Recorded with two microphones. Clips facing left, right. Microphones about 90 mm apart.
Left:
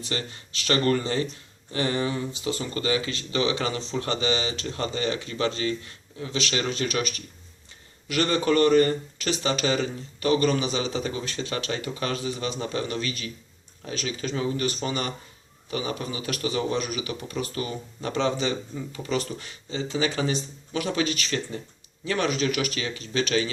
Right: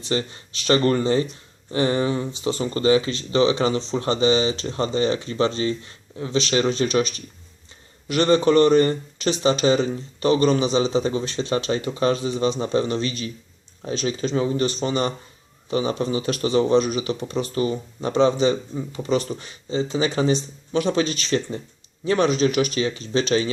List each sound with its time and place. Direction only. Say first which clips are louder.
0.0 s speech: right 7 dB; 25° right (ahead or behind)